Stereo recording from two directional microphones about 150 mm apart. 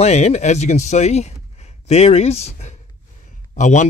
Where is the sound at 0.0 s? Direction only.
50° left (ahead or behind).